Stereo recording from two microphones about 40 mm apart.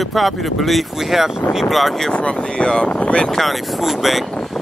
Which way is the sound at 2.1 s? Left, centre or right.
Left.